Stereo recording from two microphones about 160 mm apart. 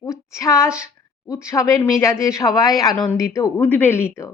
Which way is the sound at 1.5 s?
15° left (ahead or behind).